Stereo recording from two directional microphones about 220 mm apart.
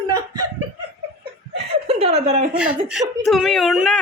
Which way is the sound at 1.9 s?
30° right (ahead or behind).